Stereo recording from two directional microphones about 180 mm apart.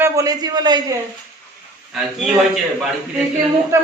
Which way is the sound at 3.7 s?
15° right (ahead or behind).